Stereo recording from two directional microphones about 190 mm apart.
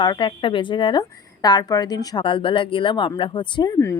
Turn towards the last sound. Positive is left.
turn(degrees=25)  # may be behind; listen again after turning